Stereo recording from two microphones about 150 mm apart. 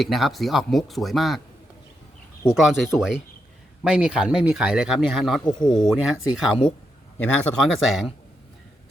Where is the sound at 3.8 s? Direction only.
5° right (ahead or behind).